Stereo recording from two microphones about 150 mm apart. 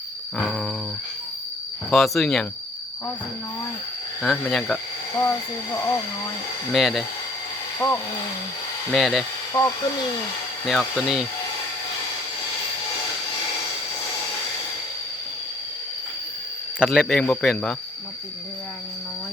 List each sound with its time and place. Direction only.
0.3 s speech: 5° left (ahead or behind)
1.9 s speech: centre (ahead or behind)
4.2 s speech: 5° left (ahead or behind)
5.1 s speech: 15° left (ahead or behind)
6.7 s speech: centre (ahead or behind)
7.8 s speech: 20° left (ahead or behind)
8.9 s speech: centre (ahead or behind)
9.5 s speech: 20° left (ahead or behind)
10.7 s speech: centre (ahead or behind)
16.8 s speech: centre (ahead or behind)